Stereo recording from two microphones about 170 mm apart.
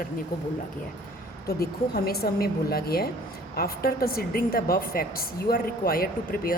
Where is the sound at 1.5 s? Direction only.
65° left (ahead or behind).